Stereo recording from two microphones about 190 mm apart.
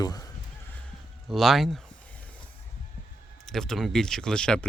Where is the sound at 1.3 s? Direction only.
Centre (ahead or behind).